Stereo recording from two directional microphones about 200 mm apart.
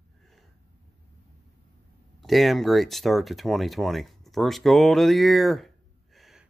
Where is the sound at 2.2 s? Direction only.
Centre (ahead or behind).